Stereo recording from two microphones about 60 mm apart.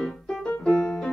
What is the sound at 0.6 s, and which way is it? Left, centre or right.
Music, centre.